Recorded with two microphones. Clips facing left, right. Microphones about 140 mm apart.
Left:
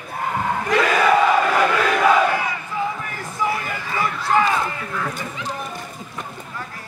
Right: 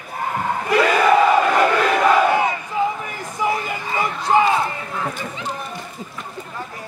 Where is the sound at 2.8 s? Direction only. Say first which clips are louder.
Right 4 dB; 20° right (ahead or behind).